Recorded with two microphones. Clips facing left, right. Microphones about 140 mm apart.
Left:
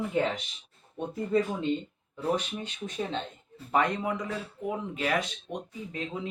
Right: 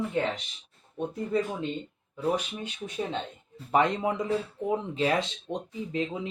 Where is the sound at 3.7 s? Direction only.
20° right (ahead or behind).